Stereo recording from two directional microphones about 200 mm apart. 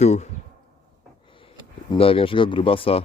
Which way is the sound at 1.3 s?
25° left (ahead or behind).